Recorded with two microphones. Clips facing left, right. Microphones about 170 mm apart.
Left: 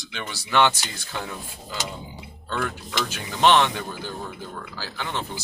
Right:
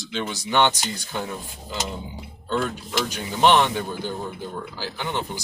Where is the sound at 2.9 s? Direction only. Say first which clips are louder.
Right 5 dB; 15° right (ahead or behind).